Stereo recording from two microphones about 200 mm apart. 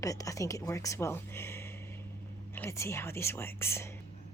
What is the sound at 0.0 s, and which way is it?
Speech, 15° left (ahead or behind).